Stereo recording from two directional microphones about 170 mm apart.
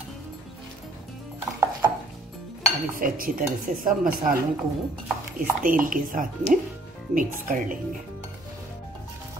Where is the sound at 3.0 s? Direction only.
55° right (ahead or behind).